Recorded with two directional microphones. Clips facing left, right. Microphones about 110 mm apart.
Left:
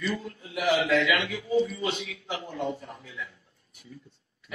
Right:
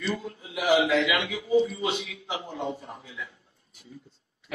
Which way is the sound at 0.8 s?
25° right (ahead or behind).